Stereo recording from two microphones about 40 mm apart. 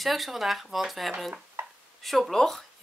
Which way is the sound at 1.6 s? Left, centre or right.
Right.